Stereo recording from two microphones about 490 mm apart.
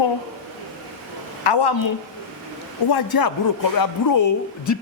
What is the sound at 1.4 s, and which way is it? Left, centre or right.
Speech, left.